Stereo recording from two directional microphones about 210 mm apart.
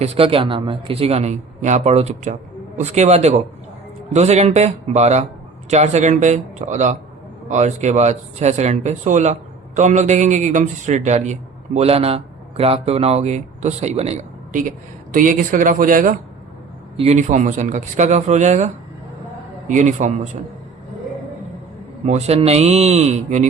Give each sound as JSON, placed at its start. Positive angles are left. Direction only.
{"t": 0.0, "sound": "a man's voice", "side_deg": -30}
{"t": 22.0, "sound": "a man's voice", "side_deg": -35}